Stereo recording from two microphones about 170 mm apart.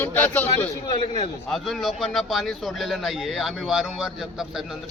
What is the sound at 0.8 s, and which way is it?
Speech, 30° left (ahead or behind).